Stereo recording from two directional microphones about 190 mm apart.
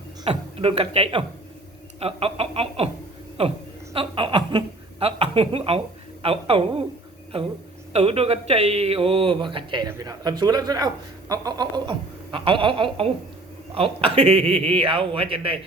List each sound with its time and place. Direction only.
0.3 s speech: 30° right (ahead or behind)
3.9 s chuckle: 25° right (ahead or behind)
6.2 s speech: 30° right (ahead or behind)
7.9 s speech: 30° right (ahead or behind)